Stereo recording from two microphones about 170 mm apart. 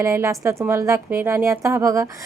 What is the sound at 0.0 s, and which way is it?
A woman's voice, 15° right (ahead or behind).